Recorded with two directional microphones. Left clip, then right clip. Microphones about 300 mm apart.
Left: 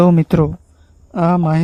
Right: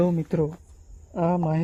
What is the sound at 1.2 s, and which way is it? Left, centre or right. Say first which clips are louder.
Speech: left 8 dB; left.